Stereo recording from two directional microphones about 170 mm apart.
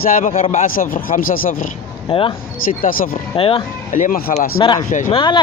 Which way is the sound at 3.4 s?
30° left (ahead or behind).